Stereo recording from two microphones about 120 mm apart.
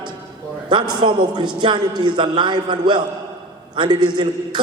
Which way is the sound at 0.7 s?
40° right (ahead or behind).